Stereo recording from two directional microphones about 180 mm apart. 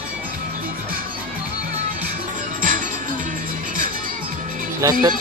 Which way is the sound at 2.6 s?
50° right (ahead or behind).